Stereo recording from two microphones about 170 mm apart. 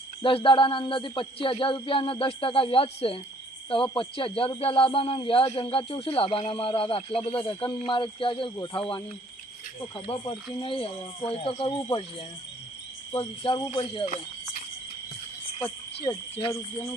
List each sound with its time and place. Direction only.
0.2 s speech: 30° left (ahead or behind)
10.1 s speech: 25° left (ahead or behind)
13.1 s speech: 35° left (ahead or behind)
16.0 s speech: 35° left (ahead or behind)